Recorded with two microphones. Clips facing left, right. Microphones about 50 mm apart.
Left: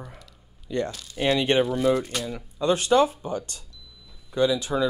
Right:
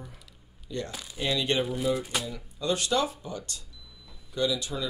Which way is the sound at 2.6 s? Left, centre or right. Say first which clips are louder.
Left 7 dB; left.